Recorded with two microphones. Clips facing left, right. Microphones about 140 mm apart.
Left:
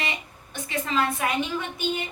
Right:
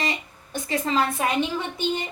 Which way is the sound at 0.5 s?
35° right (ahead or behind).